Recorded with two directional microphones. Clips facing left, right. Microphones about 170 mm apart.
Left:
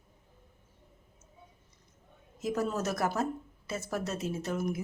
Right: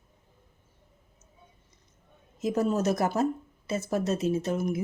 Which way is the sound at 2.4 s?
20° right (ahead or behind).